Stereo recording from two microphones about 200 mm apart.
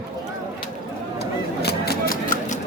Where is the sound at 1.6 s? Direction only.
50° left (ahead or behind).